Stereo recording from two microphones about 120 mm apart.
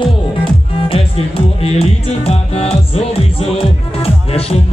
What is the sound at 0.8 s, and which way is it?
Music, 50° left (ahead or behind).